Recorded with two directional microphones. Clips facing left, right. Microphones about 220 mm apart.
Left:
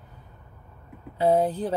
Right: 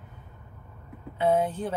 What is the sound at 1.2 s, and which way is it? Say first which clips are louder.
Speech: left 3 dB; 35° left (ahead or behind).